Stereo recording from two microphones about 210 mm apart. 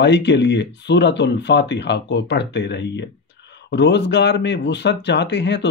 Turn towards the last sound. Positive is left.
turn(degrees=55)  # may be behind; listen again after turning